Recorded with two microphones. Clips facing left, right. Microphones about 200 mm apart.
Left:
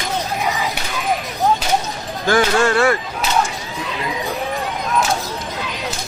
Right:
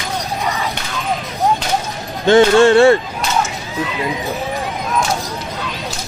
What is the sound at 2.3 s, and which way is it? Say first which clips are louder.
Speech: right 7 dB; 25° right (ahead or behind).